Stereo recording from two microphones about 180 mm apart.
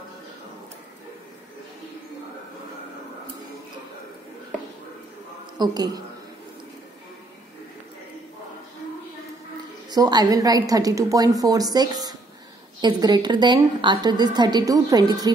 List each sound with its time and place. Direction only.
5.6 s a woman's voice: 20° right (ahead or behind)
9.8 s a woman's voice: 20° right (ahead or behind)